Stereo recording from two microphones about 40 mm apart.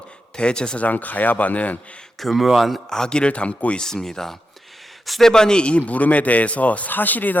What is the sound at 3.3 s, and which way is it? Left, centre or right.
Speech, left.